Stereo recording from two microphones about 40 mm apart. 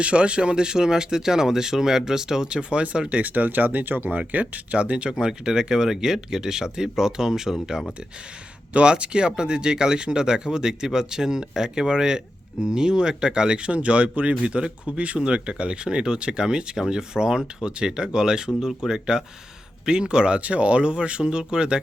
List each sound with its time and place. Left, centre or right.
0.0 s speech: right
3.1 s speech: right
4.3 s speech: right
5.1 s speech: centre
8.7 s speech: right